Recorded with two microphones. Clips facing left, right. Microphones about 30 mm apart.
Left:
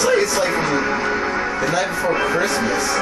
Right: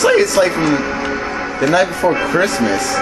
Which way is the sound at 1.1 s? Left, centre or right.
Centre.